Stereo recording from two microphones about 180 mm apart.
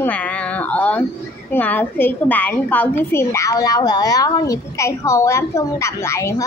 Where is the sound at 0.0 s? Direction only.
10° left (ahead or behind).